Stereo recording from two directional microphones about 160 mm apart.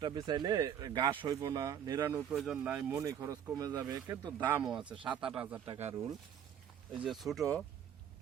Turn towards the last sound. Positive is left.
turn(degrees=5)  # may be behind; listen again after turning